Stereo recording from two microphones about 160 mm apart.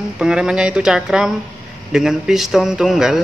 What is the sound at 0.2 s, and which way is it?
A man's voice, 5° right (ahead or behind).